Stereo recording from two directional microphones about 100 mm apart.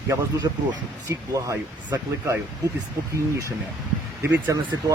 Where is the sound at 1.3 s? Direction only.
35° right (ahead or behind).